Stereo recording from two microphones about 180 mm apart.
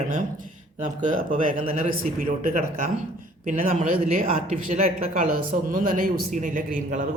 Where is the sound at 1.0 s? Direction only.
50° right (ahead or behind).